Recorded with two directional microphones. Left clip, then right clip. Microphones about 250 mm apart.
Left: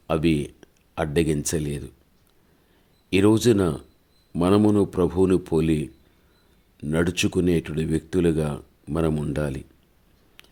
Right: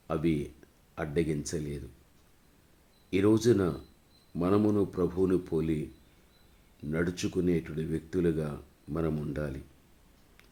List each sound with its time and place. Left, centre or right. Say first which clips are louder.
0.1 s speech: left 8 dB; left
3.1 s speech: left 6 dB; left
6.9 s speech: left 9 dB; left